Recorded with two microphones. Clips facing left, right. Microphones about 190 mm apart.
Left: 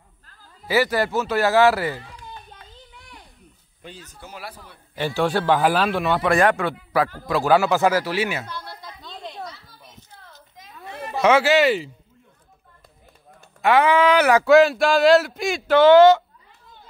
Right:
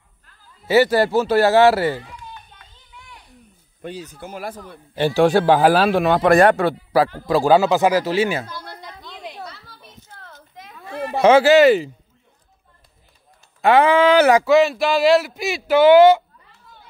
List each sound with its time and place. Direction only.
0.7 s a man's voice: 25° right (ahead or behind)
2.3 s a sound: 35° left (ahead or behind)
3.8 s speech: 65° right (ahead or behind); by 4.7 s 50° right (ahead or behind)
4.9 s a man's voice: 30° right (ahead or behind)
9.7 s a sound: 70° right (ahead or behind)
11.1 s speech: 30° right (ahead or behind)
13.6 s a man's voice: 30° right (ahead or behind)
14.4 s speech: centre (ahead or behind)